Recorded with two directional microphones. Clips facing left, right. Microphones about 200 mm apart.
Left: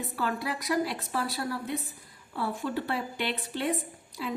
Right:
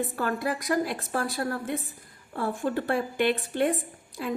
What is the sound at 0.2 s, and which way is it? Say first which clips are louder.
A woman's voice: even; 50° right (ahead or behind).